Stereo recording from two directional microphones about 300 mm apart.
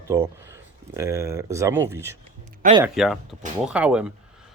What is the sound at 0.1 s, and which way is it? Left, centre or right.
Speech, centre.